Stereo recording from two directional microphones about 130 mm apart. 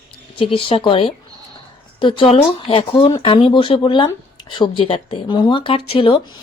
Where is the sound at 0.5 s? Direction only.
45° left (ahead or behind).